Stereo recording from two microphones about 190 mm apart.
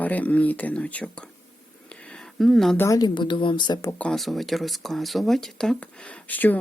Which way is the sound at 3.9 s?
5° left (ahead or behind).